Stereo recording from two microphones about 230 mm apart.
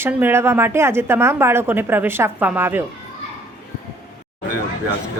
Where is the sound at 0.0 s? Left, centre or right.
Centre.